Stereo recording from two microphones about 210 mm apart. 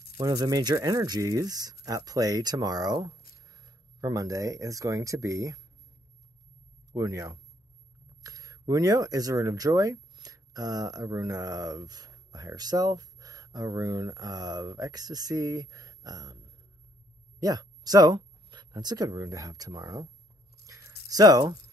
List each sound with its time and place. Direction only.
0.2 s speech: 15° right (ahead or behind)
6.9 s speech: 15° right (ahead or behind)
17.4 s speech: 20° right (ahead or behind)
20.6 s a sound: 15° right (ahead or behind)
21.1 s speech: 15° right (ahead or behind)